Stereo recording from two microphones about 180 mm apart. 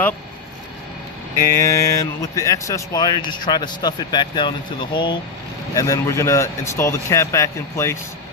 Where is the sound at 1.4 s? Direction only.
15° left (ahead or behind).